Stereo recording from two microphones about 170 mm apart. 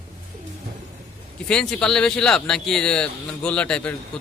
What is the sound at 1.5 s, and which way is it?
A man's voice, 5° left (ahead or behind).